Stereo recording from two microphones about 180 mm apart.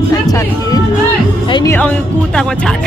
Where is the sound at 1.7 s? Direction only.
5° left (ahead or behind).